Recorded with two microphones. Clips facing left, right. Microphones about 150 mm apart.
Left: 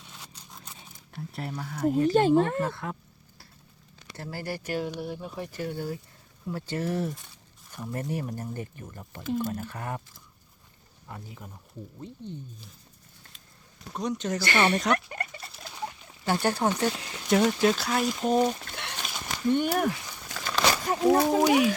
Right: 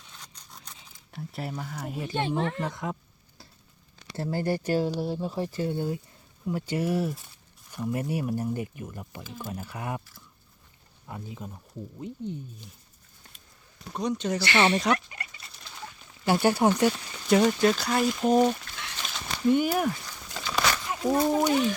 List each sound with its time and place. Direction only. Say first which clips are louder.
0.3 s a sound: left 2 dB; 10° left (ahead or behind)
1.1 s speech: right 1 dB; centre (ahead or behind)
2.0 s speech: left 6 dB; 40° left (ahead or behind)
2.6 s a sound: even; 15° right (ahead or behind)
4.2 s speech: right 7 dB; 25° right (ahead or behind); by 10.0 s 10° right (ahead or behind)
11.1 s speech: right 4 dB; 20° right (ahead or behind)
13.9 s speech: right 2 dB; centre (ahead or behind)
14.4 s speech: right 1 dB; 50° left (ahead or behind)
14.9 s rodents: left 6 dB; 50° left (ahead or behind)
16.2 s speech: right 4 dB; 10° right (ahead or behind)
18.7 s a sound: left 3 dB; 60° left (ahead or behind)
19.5 s speech: right 1 dB; 5° right (ahead or behind)
20.4 s a sound: left 2 dB; 55° left (ahead or behind)